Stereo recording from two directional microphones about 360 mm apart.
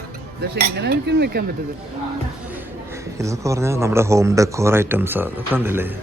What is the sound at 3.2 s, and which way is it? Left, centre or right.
Speech, centre.